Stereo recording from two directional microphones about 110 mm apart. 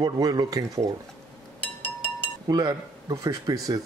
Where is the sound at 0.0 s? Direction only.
40° right (ahead or behind).